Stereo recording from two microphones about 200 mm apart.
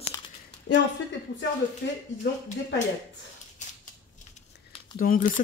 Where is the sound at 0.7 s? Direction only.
35° left (ahead or behind).